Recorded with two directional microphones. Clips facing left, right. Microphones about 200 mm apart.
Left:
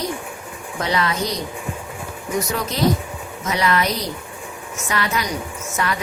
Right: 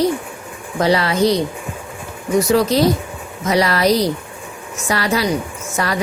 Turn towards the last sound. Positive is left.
turn(degrees=-35)  # may be behind; listen again after turning